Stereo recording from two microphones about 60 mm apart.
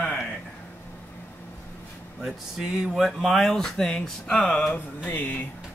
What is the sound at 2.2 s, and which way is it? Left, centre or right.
Speech, centre.